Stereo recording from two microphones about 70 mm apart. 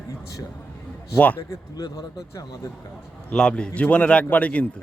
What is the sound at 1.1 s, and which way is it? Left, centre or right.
Speech, centre.